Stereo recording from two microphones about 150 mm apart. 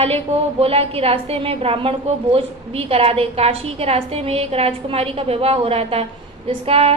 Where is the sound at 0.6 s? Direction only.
40° right (ahead or behind).